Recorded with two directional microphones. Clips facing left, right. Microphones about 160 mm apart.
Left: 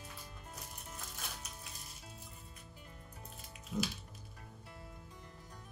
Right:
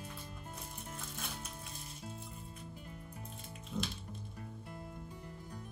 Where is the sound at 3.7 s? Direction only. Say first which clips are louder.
Left 2 dB; 5° left (ahead or behind).